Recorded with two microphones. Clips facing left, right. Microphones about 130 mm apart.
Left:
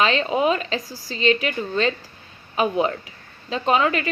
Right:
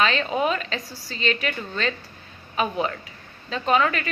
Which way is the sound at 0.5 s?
35° left (ahead or behind).